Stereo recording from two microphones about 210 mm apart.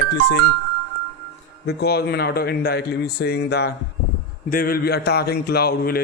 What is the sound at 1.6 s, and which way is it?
Speech, 50° left (ahead or behind).